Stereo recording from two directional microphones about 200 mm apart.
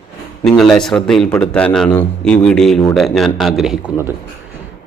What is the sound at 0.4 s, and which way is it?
Speech, centre (ahead or behind).